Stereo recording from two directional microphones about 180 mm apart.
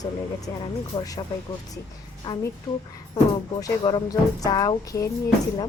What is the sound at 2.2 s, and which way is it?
Speech, 25° left (ahead or behind).